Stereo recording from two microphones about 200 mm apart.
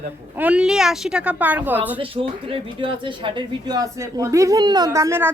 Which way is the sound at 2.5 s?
25° right (ahead or behind).